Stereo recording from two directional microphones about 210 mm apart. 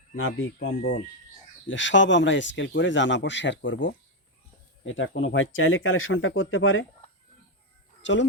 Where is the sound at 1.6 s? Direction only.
60° left (ahead or behind).